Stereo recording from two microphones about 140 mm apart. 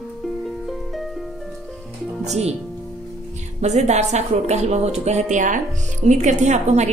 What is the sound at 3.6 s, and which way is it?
A woman's voice, 55° right (ahead or behind).